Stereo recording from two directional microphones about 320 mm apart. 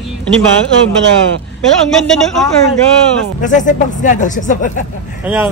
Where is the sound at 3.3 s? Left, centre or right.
Left.